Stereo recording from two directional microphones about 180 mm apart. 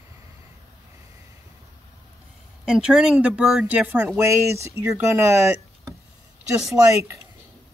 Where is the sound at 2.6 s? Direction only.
5° right (ahead or behind).